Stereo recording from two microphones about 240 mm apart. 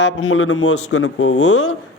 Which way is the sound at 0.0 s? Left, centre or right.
Left.